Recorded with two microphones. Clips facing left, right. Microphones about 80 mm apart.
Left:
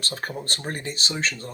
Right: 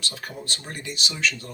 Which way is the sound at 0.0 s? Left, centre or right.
Left.